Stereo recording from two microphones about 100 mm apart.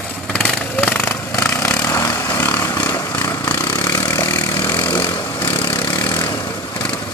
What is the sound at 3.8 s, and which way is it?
Chainsaw, 20° left (ahead or behind).